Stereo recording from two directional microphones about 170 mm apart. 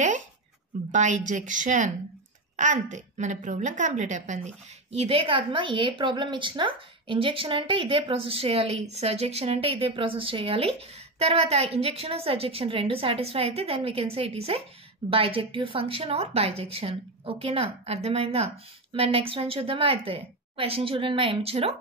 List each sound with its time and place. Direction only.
0.9 s a woman's voice: 45° right (ahead or behind)